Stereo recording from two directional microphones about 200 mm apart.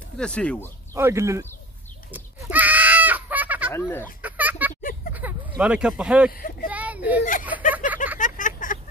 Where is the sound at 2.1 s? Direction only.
10° right (ahead or behind).